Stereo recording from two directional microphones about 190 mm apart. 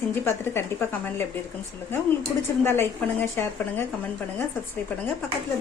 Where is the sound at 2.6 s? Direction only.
10° left (ahead or behind).